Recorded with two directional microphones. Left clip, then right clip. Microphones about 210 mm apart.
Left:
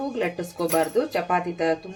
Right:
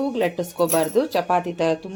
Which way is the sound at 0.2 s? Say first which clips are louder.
Right 5 dB; 30° right (ahead or behind).